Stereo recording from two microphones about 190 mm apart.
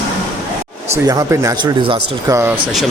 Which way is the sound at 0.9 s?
20° right (ahead or behind).